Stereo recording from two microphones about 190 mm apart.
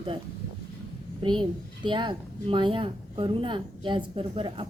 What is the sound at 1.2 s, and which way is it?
A child's voice, 25° right (ahead or behind).